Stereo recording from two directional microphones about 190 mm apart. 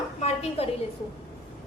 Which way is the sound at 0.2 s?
35° left (ahead or behind).